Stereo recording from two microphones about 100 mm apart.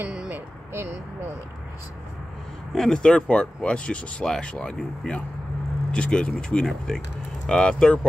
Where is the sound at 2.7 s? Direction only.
5° left (ahead or behind).